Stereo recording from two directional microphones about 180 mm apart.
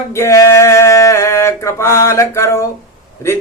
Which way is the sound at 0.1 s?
15° left (ahead or behind).